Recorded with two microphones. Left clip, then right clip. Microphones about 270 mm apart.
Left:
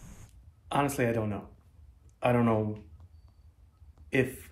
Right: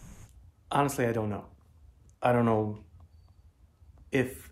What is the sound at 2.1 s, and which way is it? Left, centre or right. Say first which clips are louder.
Speech: right 1 dB; centre.